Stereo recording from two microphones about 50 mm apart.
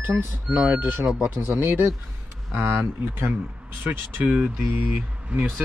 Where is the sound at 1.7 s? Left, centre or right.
Right.